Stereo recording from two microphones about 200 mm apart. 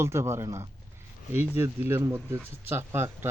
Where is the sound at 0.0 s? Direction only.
15° right (ahead or behind).